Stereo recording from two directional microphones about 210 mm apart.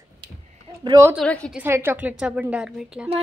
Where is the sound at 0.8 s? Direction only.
15° right (ahead or behind).